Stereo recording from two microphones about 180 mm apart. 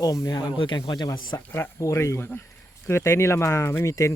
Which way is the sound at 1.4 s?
10° left (ahead or behind).